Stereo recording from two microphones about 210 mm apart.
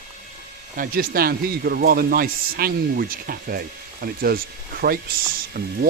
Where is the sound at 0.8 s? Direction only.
45° right (ahead or behind).